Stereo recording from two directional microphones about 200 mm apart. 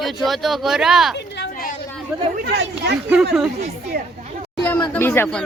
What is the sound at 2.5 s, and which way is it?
Speech, 55° right (ahead or behind).